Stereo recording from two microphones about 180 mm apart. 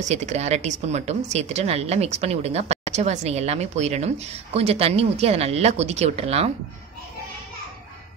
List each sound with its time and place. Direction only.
0.0 s speech: 40° right (ahead or behind)